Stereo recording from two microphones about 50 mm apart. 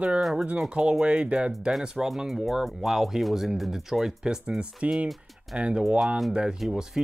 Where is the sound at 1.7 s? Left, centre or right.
Centre.